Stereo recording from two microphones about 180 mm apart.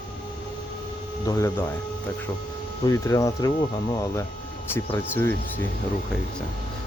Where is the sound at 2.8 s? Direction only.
20° left (ahead or behind).